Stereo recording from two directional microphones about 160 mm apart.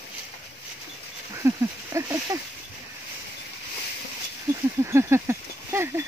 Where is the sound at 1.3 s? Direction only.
15° right (ahead or behind).